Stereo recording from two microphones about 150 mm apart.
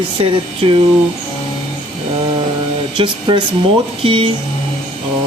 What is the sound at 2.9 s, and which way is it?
Speech, 35° right (ahead or behind).